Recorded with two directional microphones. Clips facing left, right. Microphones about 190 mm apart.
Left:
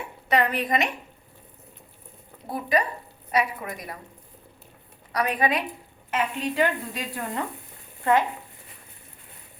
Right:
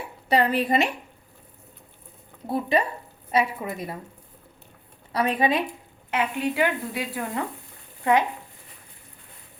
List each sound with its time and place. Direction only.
0.3 s a woman's voice: 30° right (ahead or behind)
2.5 s a woman's voice: 25° right (ahead or behind)
5.1 s a woman's voice: 30° right (ahead or behind)
6.1 s a woman's voice: 10° right (ahead or behind)